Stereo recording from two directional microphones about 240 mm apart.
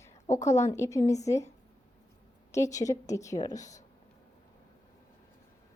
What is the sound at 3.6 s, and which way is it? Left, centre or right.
Speech, left.